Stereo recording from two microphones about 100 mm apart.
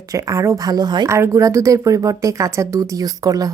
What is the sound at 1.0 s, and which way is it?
Speech, 30° right (ahead or behind).